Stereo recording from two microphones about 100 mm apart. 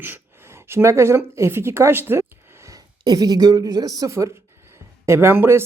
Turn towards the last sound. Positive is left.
turn(degrees=-25)  # may be behind; listen again after turning